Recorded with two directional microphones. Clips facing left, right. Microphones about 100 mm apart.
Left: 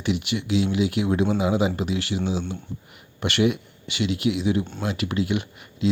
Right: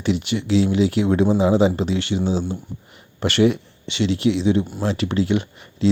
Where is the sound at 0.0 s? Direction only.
30° right (ahead or behind).